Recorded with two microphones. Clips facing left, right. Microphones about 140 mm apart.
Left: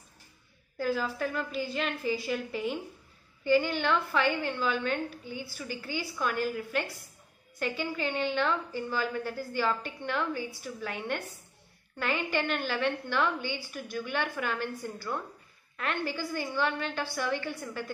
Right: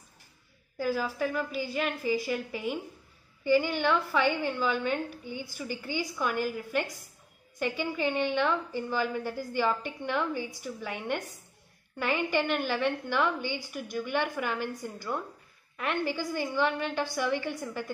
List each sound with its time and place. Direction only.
0.7 s a woman's voice: 10° right (ahead or behind)